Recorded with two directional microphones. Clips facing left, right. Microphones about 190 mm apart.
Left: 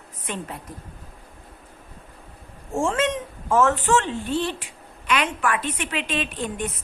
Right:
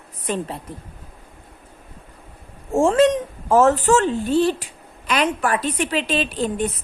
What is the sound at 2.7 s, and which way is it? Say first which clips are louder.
A woman's voice: right 8 dB; 40° right (ahead or behind).